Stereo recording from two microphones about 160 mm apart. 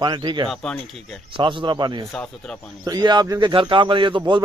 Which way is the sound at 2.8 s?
25° right (ahead or behind).